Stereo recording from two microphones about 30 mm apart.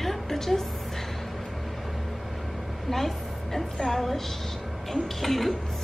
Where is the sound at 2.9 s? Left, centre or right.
Centre.